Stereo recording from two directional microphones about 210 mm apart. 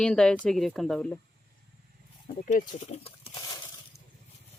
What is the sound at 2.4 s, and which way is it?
Speech, 35° left (ahead or behind).